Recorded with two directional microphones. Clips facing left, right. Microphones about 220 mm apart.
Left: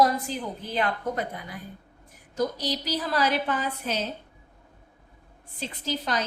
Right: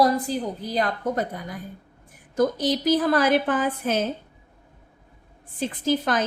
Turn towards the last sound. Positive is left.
turn(degrees=-50)  # may be behind; listen again after turning